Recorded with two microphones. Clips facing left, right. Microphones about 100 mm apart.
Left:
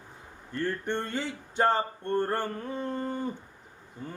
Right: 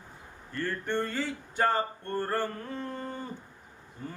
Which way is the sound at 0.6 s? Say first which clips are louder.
Even; 20° left (ahead or behind).